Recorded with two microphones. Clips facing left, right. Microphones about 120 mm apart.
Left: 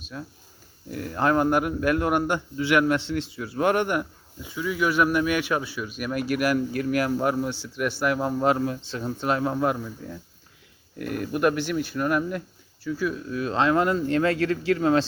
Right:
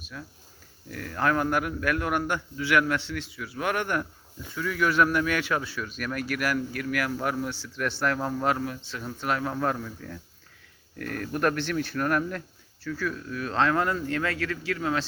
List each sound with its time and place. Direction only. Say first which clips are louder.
0.0 s speech: left 4 dB; 25° left (ahead or behind); by 12.4 s 5° left (ahead or behind)
12.9 s speech: left 4 dB; 20° left (ahead or behind)